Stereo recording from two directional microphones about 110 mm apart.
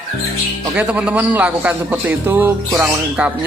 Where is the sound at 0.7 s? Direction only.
10° right (ahead or behind).